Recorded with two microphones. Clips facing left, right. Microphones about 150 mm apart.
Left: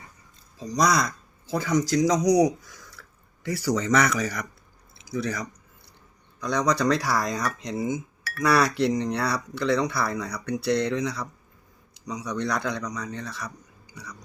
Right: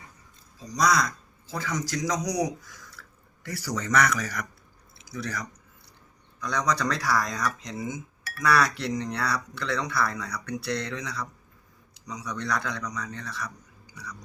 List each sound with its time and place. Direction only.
1.5 s speech: 25° left (ahead or behind)
3.0 s a sound: 20° left (ahead or behind)
3.4 s speech: 20° left (ahead or behind)